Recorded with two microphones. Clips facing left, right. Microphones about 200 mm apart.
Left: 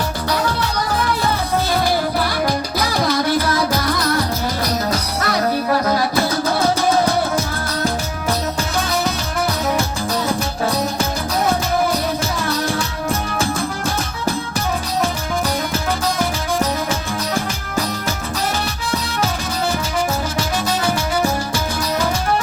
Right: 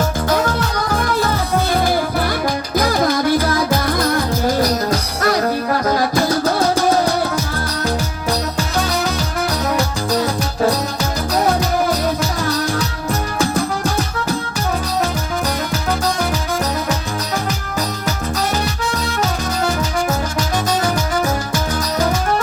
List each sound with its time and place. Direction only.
0.3 s music: 45° right (ahead or behind)
2.7 s music: 50° right (ahead or behind)
21.5 s music: 45° right (ahead or behind)